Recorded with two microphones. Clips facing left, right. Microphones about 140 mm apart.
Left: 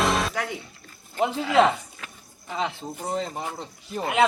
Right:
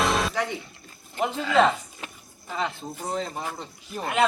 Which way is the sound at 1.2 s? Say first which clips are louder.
Left 1 dB; 15° left (ahead or behind).